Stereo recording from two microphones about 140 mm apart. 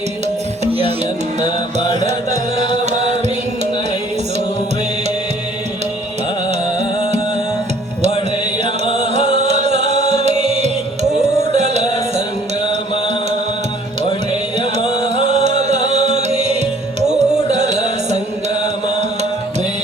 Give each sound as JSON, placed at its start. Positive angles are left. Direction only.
{"t": 0.6, "sound": "music", "side_deg": -45}
{"t": 1.5, "sound": "music", "side_deg": 35}
{"t": 2.0, "sound": "music", "side_deg": -55}
{"t": 8.1, "sound": "music", "side_deg": 40}
{"t": 9.4, "sound": "music", "side_deg": -55}
{"t": 14.6, "sound": "music", "side_deg": 40}
{"t": 15.1, "sound": "music", "side_deg": -55}